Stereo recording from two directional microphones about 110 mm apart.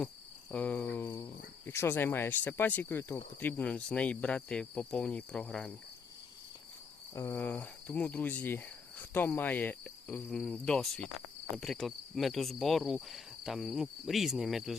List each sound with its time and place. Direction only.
0.5 s cricket: 15° left (ahead or behind)
7.1 s insect: 25° left (ahead or behind)
10.4 s cricket: 5° left (ahead or behind)